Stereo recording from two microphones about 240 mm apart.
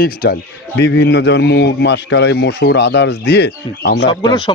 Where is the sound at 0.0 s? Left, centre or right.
Left.